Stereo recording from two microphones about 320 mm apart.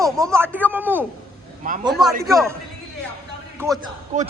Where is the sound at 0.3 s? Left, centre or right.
Centre.